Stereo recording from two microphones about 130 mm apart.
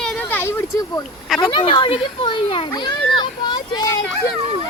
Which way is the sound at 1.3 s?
35° left (ahead or behind).